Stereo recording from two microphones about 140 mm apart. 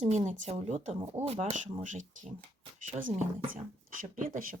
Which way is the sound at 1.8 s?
65° right (ahead or behind).